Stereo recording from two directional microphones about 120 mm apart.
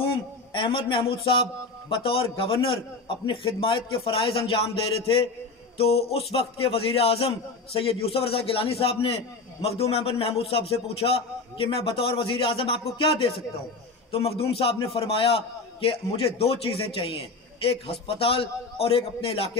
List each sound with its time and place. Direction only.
0.0 s a man's voice: 45° left (ahead or behind)
5.8 s a man's voice: 55° left (ahead or behind)